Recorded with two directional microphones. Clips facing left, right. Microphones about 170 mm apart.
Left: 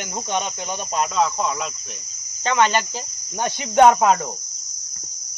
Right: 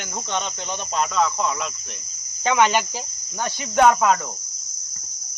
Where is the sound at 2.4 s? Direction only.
10° right (ahead or behind).